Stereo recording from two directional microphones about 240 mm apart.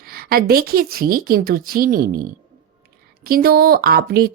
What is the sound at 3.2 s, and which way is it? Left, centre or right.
A woman's voice, right.